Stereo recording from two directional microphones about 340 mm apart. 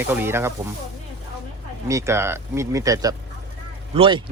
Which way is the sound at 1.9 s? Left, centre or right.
Centre.